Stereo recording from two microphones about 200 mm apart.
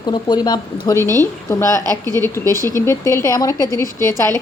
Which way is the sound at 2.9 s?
15° left (ahead or behind).